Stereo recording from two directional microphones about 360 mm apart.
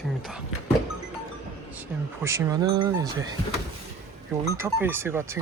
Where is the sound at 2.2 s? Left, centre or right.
Centre.